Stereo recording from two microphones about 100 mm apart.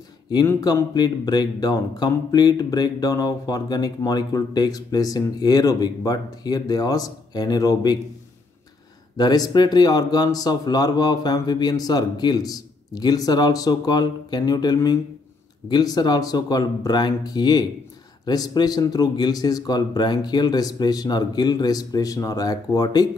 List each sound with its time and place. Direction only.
0.9 s speech: 45° left (ahead or behind)
9.1 s speech: 40° left (ahead or behind)